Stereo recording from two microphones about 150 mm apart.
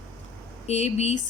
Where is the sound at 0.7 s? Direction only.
50° left (ahead or behind).